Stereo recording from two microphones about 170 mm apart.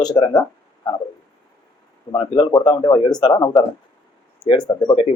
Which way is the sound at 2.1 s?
25° left (ahead or behind).